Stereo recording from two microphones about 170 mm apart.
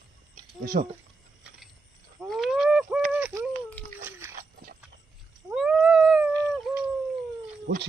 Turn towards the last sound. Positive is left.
turn(degrees=-90)